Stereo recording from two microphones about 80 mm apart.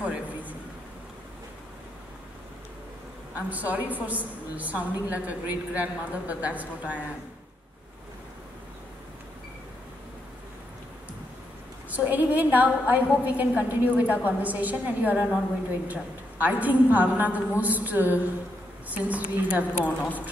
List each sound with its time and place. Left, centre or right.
0.0 s a sound: centre
3.3 s a woman's voice: centre
11.9 s a woman's voice: right
19.8 s a woman's voice: left